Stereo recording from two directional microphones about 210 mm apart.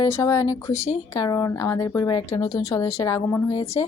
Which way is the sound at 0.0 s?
15° left (ahead or behind).